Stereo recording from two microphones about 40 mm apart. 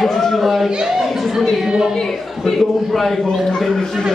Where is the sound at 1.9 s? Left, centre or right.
Centre.